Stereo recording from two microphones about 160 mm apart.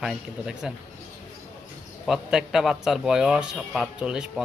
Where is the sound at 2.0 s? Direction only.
5° right (ahead or behind).